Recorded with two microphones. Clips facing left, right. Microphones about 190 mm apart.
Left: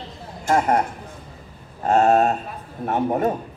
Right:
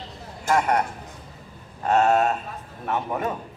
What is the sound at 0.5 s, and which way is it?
Speech, 30° left (ahead or behind).